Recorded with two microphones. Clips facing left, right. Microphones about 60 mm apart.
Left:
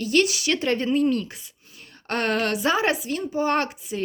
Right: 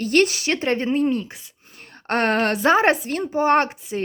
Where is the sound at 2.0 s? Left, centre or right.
Right.